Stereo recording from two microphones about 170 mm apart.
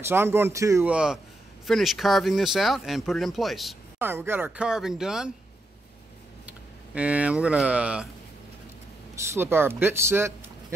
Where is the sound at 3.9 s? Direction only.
15° right (ahead or behind).